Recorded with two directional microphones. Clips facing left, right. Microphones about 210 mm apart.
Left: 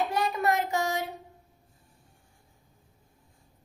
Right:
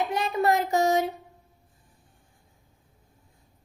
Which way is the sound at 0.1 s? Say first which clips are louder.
Right 3 dB; 20° right (ahead or behind).